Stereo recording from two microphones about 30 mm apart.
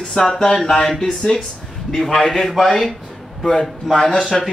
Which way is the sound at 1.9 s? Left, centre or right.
Centre.